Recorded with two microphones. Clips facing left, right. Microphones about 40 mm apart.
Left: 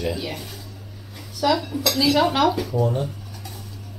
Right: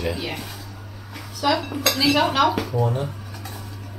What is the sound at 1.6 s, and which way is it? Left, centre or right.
Speech, right.